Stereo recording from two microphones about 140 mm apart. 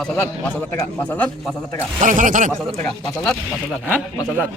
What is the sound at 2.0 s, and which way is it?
Speech, 65° right (ahead or behind).